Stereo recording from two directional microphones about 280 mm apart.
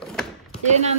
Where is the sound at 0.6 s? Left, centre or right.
Right.